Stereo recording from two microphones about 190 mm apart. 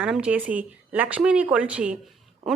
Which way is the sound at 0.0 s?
5° right (ahead or behind).